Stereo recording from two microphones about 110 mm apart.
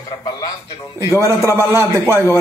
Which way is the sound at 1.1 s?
25° right (ahead or behind).